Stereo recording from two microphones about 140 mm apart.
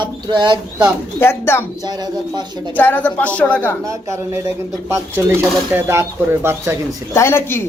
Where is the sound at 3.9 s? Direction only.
20° right (ahead or behind).